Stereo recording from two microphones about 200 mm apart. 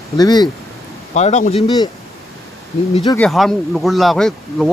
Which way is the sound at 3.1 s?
5° left (ahead or behind).